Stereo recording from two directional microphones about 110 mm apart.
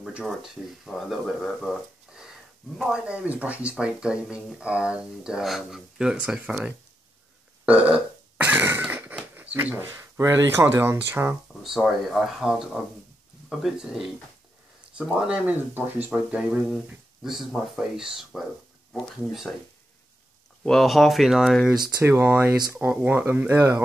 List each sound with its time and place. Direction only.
0.0 s speech: 5° right (ahead or behind)
7.6 s burping: 10° right (ahead or behind)
9.8 s speech: 25° right (ahead or behind)
11.6 s speech: centre (ahead or behind)
20.6 s speech: centre (ahead or behind)
22.0 s speech: 20° right (ahead or behind)